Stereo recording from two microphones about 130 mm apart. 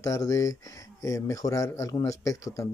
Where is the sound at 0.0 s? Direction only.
25° left (ahead or behind).